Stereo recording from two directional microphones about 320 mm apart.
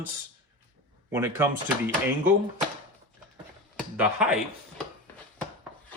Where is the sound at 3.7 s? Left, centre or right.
Centre.